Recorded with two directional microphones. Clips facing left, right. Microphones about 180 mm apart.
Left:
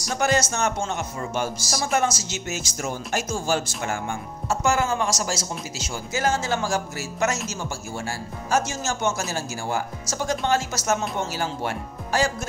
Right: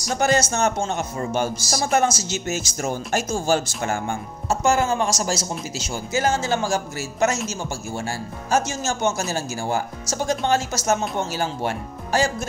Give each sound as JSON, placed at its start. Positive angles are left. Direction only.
{"t": 0.2, "sound": "speech", "side_deg": -35}